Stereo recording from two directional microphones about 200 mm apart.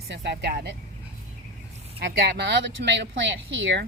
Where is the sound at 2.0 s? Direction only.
60° right (ahead or behind).